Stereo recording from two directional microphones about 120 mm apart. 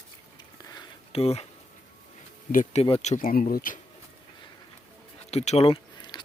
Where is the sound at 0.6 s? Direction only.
35° left (ahead or behind).